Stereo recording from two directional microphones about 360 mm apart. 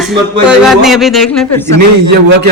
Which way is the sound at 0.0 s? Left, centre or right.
Centre.